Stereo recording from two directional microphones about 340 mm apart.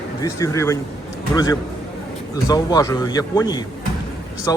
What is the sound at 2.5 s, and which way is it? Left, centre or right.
Speech, centre.